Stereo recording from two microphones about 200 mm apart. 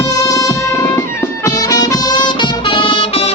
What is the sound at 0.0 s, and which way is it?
Music, 15° left (ahead or behind).